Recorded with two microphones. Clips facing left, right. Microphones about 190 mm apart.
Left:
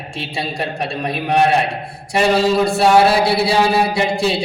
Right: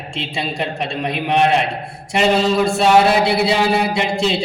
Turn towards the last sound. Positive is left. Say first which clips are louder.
# left 1 dB
turn(degrees=-20)  # may be behind; listen again after turning